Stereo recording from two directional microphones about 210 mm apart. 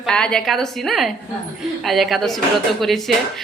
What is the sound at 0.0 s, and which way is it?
Speech, 5° left (ahead or behind).